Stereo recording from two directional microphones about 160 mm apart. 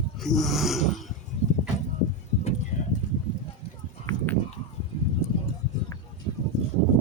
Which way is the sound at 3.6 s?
35° left (ahead or behind).